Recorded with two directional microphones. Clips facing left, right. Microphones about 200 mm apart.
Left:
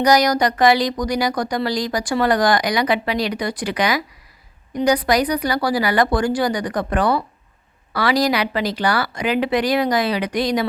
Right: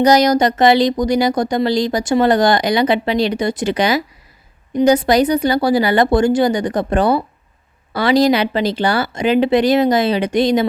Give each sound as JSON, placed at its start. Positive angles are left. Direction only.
{"t": 0.0, "sound": "speech", "side_deg": -25}